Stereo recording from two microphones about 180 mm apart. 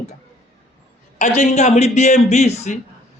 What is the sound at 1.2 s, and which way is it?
A man's voice, 40° left (ahead or behind).